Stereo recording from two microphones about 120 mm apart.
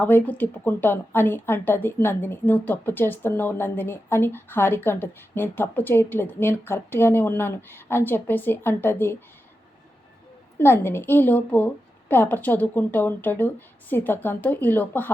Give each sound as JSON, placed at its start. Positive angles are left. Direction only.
{"t": 0.0, "sound": "a woman's voice", "side_deg": 15}
{"t": 10.6, "sound": "a woman's voice", "side_deg": 20}